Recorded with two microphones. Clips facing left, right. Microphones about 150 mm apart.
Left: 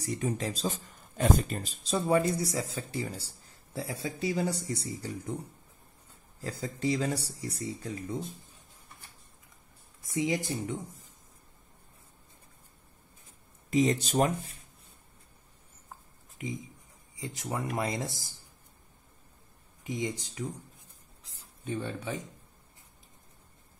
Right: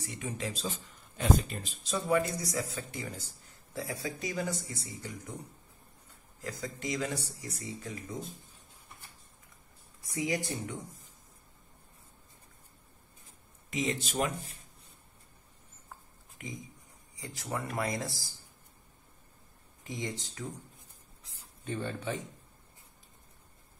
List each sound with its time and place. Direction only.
0.0 s a man's voice: 40° left (ahead or behind)
6.4 s a man's voice: 30° left (ahead or behind)
10.2 s speech: 25° left (ahead or behind)
13.7 s a man's voice: 40° left (ahead or behind)
16.4 s speech: 20° left (ahead or behind)
19.8 s speech: 20° left (ahead or behind)
21.6 s speech: 10° left (ahead or behind)